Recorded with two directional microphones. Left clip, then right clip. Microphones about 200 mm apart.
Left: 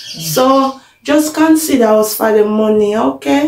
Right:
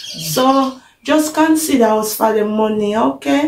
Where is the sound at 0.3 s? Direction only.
5° right (ahead or behind).